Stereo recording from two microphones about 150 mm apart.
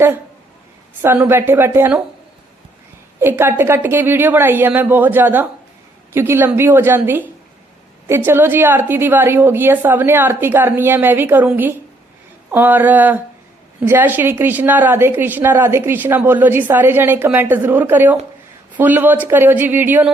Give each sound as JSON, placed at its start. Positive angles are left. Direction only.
{"t": 1.0, "sound": "a woman's voice", "side_deg": -15}
{"t": 3.2, "sound": "a woman's voice", "side_deg": -15}